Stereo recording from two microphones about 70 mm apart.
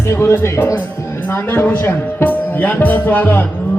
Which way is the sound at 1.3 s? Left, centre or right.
Left.